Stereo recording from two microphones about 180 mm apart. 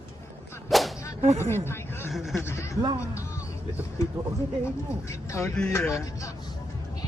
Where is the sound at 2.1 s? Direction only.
Centre (ahead or behind).